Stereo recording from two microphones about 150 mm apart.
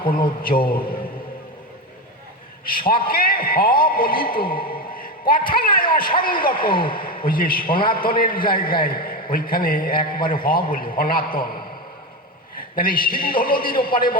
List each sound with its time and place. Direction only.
0.4 s a man's voice: 75° left (ahead or behind)
2.6 s a man's voice: 75° left (ahead or behind)